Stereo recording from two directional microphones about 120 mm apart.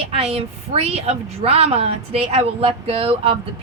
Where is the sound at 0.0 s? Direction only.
55° right (ahead or behind).